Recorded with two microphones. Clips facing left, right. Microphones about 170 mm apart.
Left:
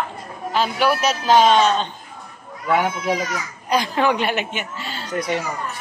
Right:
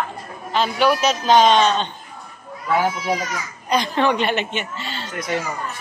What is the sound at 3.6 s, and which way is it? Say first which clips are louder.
A woman's voice: even; 5° left (ahead or behind).